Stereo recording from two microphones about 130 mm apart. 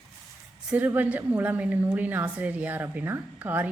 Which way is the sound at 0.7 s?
15° right (ahead or behind).